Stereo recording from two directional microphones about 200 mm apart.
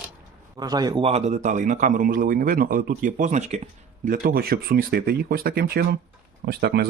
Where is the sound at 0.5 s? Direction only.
20° right (ahead or behind).